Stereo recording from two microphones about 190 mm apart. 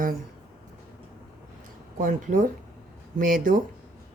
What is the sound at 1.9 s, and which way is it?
Speech, 45° right (ahead or behind).